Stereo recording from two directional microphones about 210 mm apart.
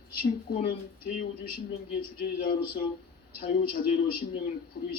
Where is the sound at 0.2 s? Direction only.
45° left (ahead or behind).